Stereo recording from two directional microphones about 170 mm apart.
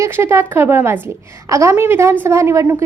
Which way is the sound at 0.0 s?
15° right (ahead or behind).